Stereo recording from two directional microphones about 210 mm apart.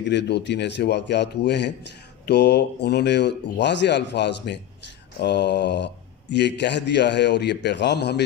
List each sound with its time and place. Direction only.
0.1 s speech: 55° left (ahead or behind)